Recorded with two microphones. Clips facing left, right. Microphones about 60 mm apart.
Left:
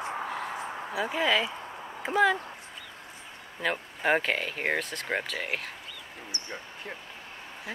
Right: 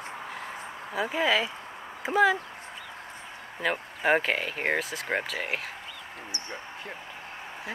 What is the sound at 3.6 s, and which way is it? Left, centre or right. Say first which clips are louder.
Speech: right 1 dB; centre.